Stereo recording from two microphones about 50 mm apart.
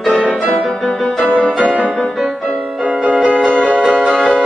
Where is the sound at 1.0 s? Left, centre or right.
Centre.